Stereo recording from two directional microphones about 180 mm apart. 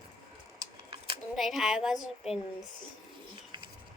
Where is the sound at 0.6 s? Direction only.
25° right (ahead or behind).